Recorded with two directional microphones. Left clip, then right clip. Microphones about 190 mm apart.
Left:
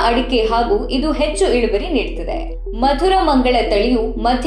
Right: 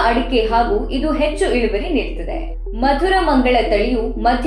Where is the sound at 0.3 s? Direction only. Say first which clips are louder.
Even; 30° left (ahead or behind).